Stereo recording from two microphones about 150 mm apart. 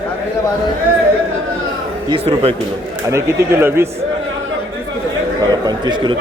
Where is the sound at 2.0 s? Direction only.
40° right (ahead or behind).